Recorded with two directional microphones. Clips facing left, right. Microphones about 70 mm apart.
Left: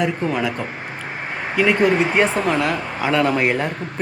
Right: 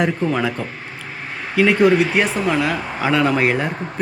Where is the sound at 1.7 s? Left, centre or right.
Left.